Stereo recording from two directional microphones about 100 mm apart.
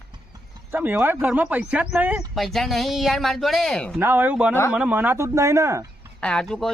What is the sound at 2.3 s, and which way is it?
Speech, centre (ahead or behind).